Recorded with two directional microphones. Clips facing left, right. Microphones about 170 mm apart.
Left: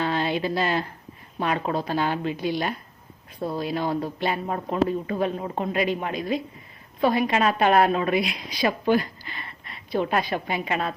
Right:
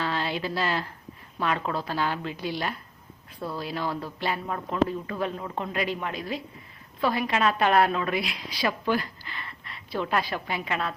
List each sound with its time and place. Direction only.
0.0 s a sound: 20° left (ahead or behind)
1.4 s speech: 20° left (ahead or behind)
4.4 s speech: 35° left (ahead or behind)
4.9 s speech: 20° left (ahead or behind)
5.7 s a man's voice: 15° left (ahead or behind)